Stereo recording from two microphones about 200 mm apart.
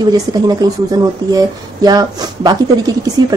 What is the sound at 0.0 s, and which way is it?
Speech, 20° right (ahead or behind).